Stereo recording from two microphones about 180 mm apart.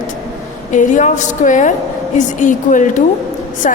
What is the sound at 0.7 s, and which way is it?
A woman's voice, 45° left (ahead or behind).